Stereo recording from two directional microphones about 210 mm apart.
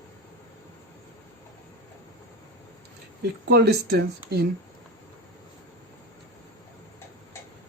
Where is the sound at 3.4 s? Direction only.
50° right (ahead or behind).